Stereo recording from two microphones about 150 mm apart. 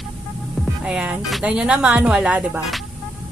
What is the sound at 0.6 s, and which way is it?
A woman's voice, 10° right (ahead or behind).